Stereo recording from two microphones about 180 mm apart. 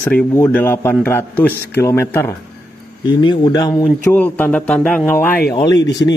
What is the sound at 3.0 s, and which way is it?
Speech, 25° left (ahead or behind).